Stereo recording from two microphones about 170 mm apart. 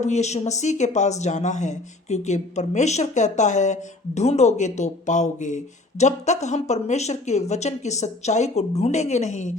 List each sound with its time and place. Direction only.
0.0 s speech: 40° left (ahead or behind)